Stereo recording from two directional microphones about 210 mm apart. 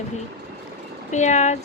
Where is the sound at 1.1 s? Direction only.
35° left (ahead or behind).